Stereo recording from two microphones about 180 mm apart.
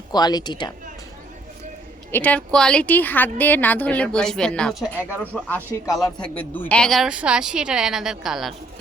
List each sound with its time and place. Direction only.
0.1 s a woman's voice: 20° left (ahead or behind)
2.1 s a woman's voice: 10° left (ahead or behind)